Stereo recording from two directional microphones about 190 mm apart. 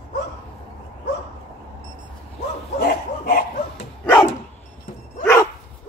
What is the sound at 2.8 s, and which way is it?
Bow-wow, 50° left (ahead or behind).